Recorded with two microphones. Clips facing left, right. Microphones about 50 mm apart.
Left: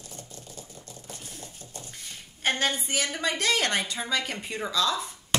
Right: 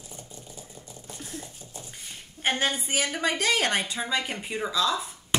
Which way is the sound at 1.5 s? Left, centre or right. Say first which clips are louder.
Even; centre.